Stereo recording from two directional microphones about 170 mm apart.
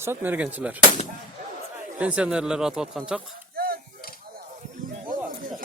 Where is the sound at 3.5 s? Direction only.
60° right (ahead or behind).